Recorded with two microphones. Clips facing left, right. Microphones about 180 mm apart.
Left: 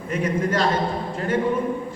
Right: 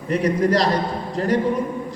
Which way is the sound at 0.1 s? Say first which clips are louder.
Right 5 dB; 35° right (ahead or behind).